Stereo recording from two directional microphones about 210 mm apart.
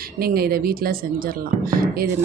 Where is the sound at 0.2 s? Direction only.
45° right (ahead or behind).